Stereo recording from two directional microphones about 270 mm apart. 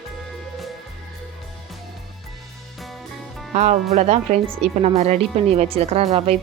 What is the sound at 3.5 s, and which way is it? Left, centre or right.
A woman's voice, right.